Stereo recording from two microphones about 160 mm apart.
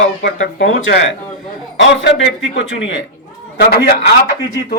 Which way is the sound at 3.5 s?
90° left.